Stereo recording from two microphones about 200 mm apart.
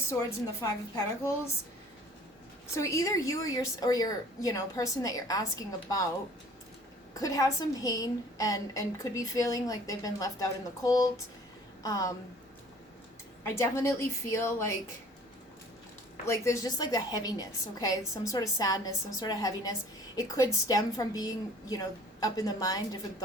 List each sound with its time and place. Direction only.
0.6 s a woman's voice: 15° left (ahead or behind)
2.7 s a woman's voice: 15° left (ahead or behind)
7.1 s a woman's voice: 15° left (ahead or behind)
13.4 s a woman's voice: 15° left (ahead or behind)
16.2 s a woman's voice: 15° left (ahead or behind)